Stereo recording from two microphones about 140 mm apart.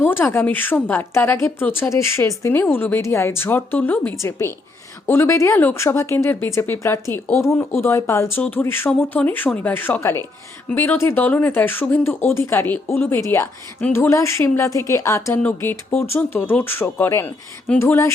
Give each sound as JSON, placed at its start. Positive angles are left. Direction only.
{"t": 0.0, "sound": "speech", "side_deg": 15}